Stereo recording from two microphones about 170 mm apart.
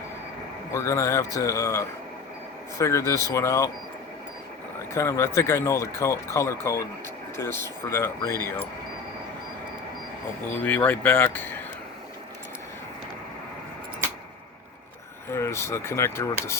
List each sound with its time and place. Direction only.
0.7 s speech: 15° left (ahead or behind)
4.9 s speech: 15° left (ahead or behind)
10.6 s speech: 10° left (ahead or behind)
15.3 s speech: 15° left (ahead or behind)